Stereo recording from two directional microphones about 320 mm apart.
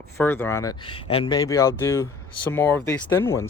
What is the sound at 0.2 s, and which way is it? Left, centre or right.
Speech, centre.